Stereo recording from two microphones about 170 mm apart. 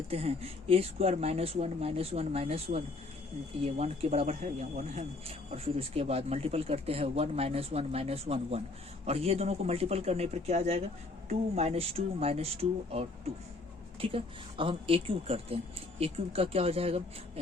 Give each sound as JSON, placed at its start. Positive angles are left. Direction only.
{"t": 0.1, "sound": "speech", "side_deg": -35}